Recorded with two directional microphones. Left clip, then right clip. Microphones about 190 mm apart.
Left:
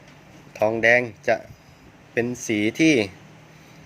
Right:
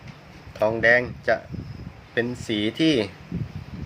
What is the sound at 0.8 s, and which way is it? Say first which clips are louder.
Speech: left 1 dB; 20° left (ahead or behind).